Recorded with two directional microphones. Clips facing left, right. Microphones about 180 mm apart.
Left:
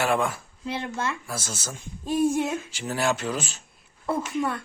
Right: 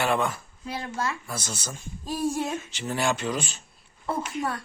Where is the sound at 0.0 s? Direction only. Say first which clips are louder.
Left 1 dB; 5° left (ahead or behind).